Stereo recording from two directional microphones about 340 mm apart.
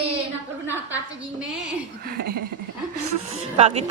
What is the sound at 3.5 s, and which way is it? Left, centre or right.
Speech, centre.